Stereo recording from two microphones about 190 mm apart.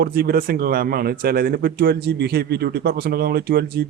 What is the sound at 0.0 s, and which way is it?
Speech, 55° right (ahead or behind).